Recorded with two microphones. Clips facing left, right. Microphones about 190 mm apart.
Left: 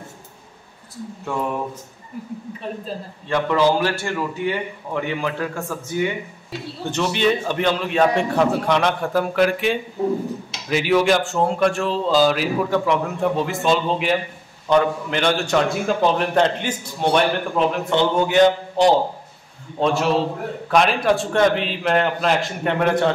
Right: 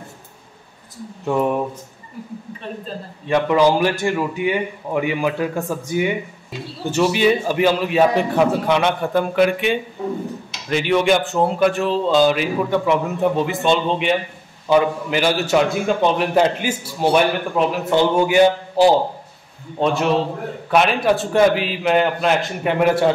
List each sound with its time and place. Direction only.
1.2 s speech: 20° right (ahead or behind)
3.3 s a man's voice: 15° right (ahead or behind)